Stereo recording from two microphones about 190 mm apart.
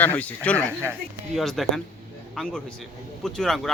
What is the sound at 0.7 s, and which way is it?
Speech, 10° right (ahead or behind).